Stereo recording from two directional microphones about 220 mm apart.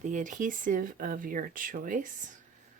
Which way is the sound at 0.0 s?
35° right (ahead or behind).